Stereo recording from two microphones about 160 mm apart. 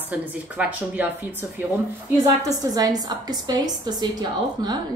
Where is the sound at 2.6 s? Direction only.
25° right (ahead or behind).